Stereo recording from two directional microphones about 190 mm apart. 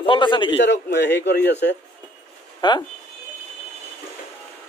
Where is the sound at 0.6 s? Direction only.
65° left (ahead or behind).